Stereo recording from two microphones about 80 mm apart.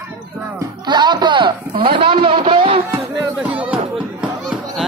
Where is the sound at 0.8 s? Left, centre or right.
Right.